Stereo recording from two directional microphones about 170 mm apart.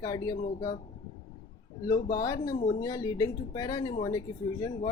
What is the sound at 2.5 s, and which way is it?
Speech, 35° left (ahead or behind).